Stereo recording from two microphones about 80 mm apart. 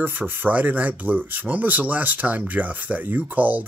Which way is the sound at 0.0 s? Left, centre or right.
Right.